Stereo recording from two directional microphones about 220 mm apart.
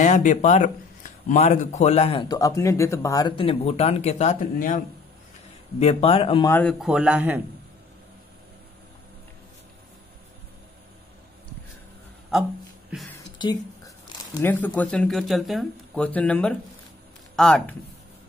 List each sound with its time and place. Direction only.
0.0 s a man's voice: 35° left (ahead or behind)
5.8 s a man's voice: 25° left (ahead or behind)
6.4 s a man's voice: 10° left (ahead or behind); by 7.4 s 10° right (ahead or behind)
12.3 s a man's voice: centre (ahead or behind)
13.4 s a man's voice: 20° left (ahead or behind); by 17.7 s centre (ahead or behind)